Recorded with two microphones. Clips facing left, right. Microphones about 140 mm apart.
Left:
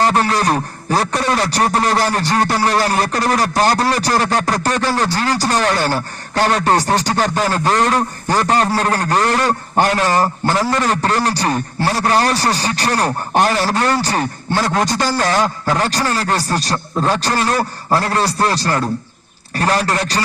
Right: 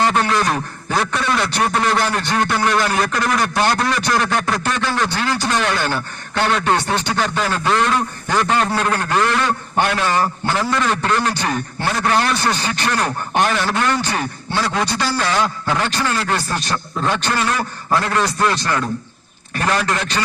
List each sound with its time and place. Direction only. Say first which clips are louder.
0.0 s speech: left 2 dB; 35° left (ahead or behind)